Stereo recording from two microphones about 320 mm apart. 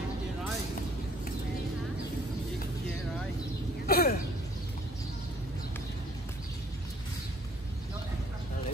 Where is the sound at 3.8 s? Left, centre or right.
Left.